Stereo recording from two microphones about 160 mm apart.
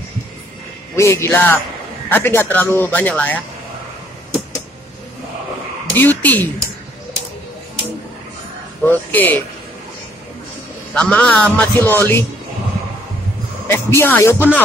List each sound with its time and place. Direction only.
0.9 s a man's voice: 15° left (ahead or behind)
5.9 s a man's voice: 10° left (ahead or behind)
8.8 s a man's voice: 10° left (ahead or behind)
11.0 s a man's voice: 5° left (ahead or behind)
13.7 s a man's voice: 15° left (ahead or behind)